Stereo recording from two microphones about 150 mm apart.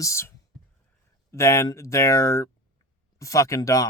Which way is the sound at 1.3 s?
20° left (ahead or behind).